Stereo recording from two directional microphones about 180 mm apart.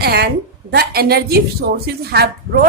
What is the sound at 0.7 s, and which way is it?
Speech, 60° right (ahead or behind).